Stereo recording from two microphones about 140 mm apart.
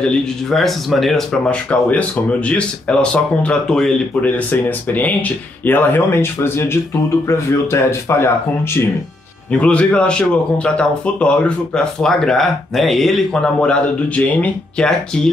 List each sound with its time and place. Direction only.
0.0 s speech: 5° left (ahead or behind); by 8.3 s 20° left (ahead or behind)
9.5 s speech: 10° left (ahead or behind)